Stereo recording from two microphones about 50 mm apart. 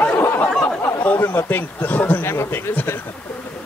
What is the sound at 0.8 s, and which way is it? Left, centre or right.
Speech, left.